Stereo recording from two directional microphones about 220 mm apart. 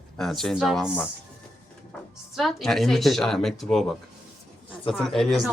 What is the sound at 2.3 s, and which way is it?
Speech, centre (ahead or behind).